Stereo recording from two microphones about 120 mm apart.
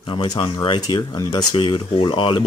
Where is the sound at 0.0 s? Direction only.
40° left (ahead or behind).